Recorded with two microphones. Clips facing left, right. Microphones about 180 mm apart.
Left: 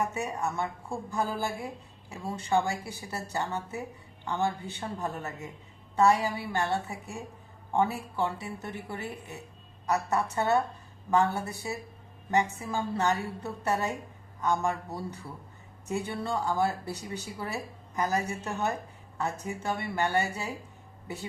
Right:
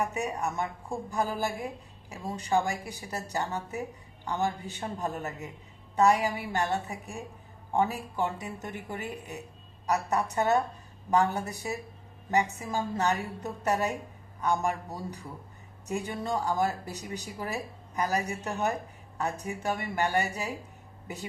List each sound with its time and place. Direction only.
0.0 s a woman's voice: 15° right (ahead or behind)